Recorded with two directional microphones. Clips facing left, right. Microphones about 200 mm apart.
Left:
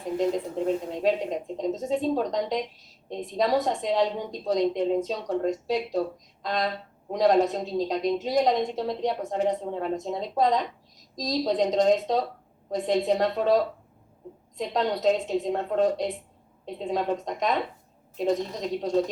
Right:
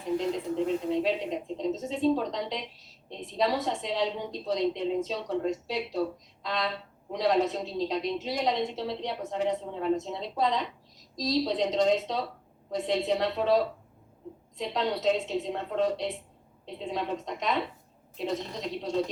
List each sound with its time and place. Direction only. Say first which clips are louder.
1.0 s speech: left 4 dB; 45° left (ahead or behind)